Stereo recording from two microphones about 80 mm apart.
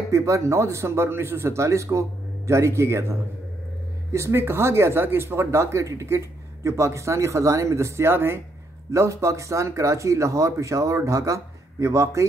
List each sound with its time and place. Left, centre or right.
0.1 s speech: right